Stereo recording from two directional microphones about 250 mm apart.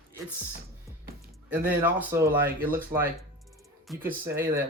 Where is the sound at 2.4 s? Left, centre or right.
Right.